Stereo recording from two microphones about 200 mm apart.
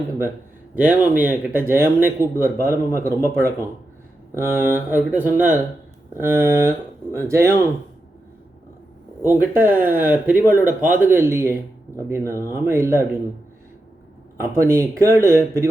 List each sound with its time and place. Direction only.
0.8 s speech: 10° right (ahead or behind)
9.2 s speech: 10° right (ahead or behind)
10.8 s speech: 40° right (ahead or behind)
11.1 s speech: 15° right (ahead or behind)
14.5 s speech: 15° right (ahead or behind)